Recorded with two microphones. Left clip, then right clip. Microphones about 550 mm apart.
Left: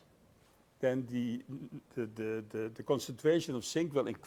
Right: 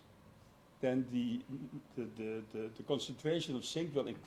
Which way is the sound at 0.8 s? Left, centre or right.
Left.